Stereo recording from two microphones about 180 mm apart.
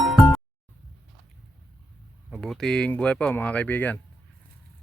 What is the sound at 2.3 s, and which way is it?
Speech, 5° left (ahead or behind).